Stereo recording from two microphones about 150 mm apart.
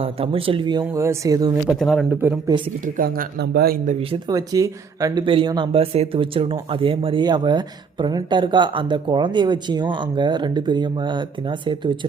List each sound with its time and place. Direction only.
0.0 s speech: 40° right (ahead or behind)
0.9 s speech: 20° right (ahead or behind)
1.6 s speech: centre (ahead or behind)
2.0 s speech: 10° right (ahead or behind)
2.8 s speech: 70° right (ahead or behind); by 3.9 s 85° right
4.3 s speech: 25° right (ahead or behind)
5.2 s speech: 35° right (ahead or behind)